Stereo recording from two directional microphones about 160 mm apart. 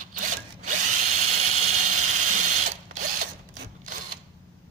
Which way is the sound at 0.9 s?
55° right (ahead or behind).